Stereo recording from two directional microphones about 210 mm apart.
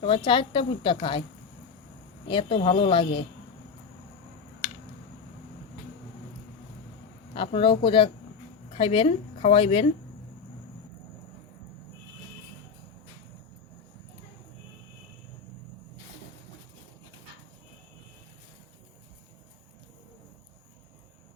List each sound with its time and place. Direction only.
0.0 s a woman's voice: 25° left (ahead or behind)
2.3 s a woman's voice: 25° left (ahead or behind)
7.3 s a woman's voice: 25° left (ahead or behind)